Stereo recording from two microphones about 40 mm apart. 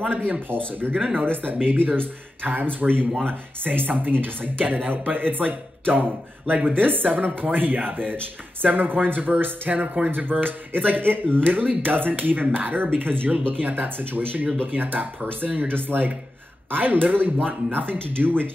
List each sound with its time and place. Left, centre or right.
0.0 s speech: right